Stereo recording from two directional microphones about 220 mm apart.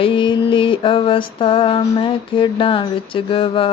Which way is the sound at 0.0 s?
25° left (ahead or behind).